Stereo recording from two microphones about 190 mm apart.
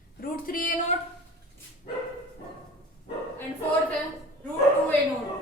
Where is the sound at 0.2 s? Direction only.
50° left (ahead or behind).